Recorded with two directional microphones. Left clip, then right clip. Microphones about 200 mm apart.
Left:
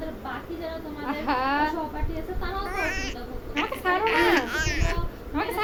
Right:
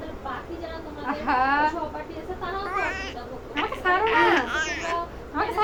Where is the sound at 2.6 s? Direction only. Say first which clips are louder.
Right 1 dB; 15° left (ahead or behind).